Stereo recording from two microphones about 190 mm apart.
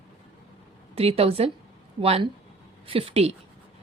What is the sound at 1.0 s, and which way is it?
A woman's voice, 30° right (ahead or behind).